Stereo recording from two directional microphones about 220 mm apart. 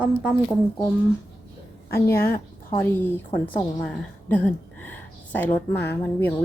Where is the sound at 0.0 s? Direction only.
5° right (ahead or behind).